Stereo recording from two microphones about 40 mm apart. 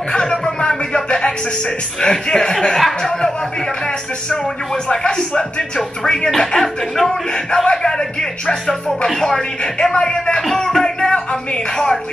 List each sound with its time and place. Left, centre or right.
0.1 s music: left
2.0 s speech: centre
4.8 s speech: left
5.8 s speech: centre
7.6 s speech: centre
10.5 s music: centre